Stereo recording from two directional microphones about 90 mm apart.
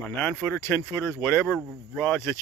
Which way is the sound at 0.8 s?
30° left (ahead or behind).